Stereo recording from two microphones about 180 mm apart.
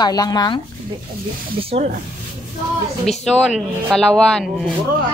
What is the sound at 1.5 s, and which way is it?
Speech, 35° right (ahead or behind).